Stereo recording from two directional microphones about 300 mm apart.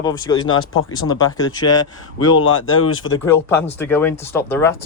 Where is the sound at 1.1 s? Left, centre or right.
Centre.